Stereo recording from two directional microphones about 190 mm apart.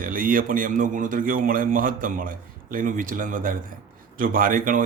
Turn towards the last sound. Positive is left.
turn(degrees=-45)  # may be behind; listen again after turning